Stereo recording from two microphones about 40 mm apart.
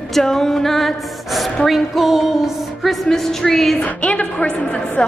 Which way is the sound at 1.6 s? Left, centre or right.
Centre.